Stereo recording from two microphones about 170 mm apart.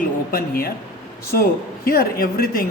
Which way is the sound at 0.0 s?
60° left (ahead or behind).